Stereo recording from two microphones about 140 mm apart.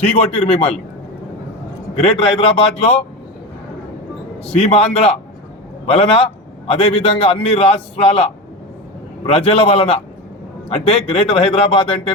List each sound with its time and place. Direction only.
0.0 s a man's voice: 45° left (ahead or behind)
2.0 s a man's voice: 40° left (ahead or behind)
4.4 s a man's voice: 45° left (ahead or behind)